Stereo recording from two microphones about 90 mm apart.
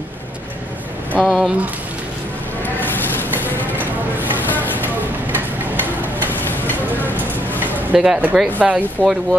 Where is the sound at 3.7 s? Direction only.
20° right (ahead or behind).